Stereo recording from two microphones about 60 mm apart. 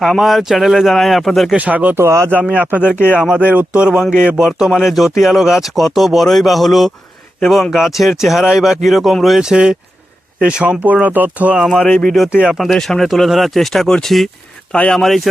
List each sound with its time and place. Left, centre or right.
0.0 s speech: centre
1.5 s speech: right
2.0 s speech: right
2.5 s speech: right
2.8 s speech: left
3.3 s speech: right; by 9.1 s centre
9.4 s speech: centre
11.8 s speech: left
12.3 s speech: centre
12.7 s speech: centre